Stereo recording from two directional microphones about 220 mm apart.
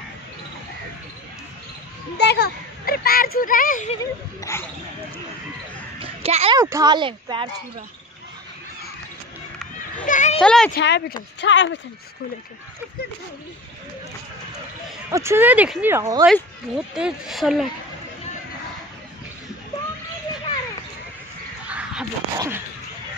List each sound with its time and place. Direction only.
2.1 s a sound: 50° left (ahead or behind)
4.0 s speech: 15° left (ahead or behind)
5.9 s a sound: 25° right (ahead or behind)
6.6 s speech: 15° right (ahead or behind)
10.0 s a child's voice: 35° left (ahead or behind)
10.4 s speech: 5° left (ahead or behind)
10.8 s speech: 50° left (ahead or behind)
15.0 s speech: 15° right (ahead or behind)
16.9 s speech: centre (ahead or behind)
21.6 s a sound: 5° right (ahead or behind)